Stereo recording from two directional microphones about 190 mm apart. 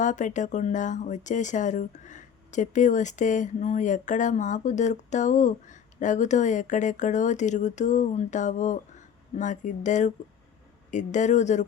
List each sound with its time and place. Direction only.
0.0 s speech: 40° left (ahead or behind)